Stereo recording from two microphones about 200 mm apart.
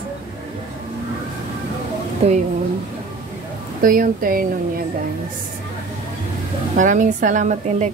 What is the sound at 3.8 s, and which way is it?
Speech, 45° right (ahead or behind).